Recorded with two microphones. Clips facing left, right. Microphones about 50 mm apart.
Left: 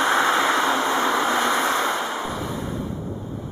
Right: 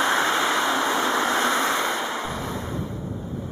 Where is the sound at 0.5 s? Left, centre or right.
Centre.